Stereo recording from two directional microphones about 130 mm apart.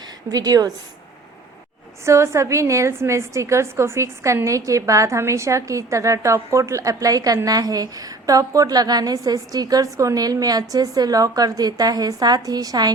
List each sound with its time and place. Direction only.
0.3 s a woman's voice: 30° right (ahead or behind)
2.0 s a woman's voice: 20° right (ahead or behind)